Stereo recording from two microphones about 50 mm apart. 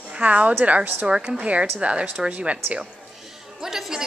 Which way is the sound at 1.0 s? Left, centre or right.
Centre.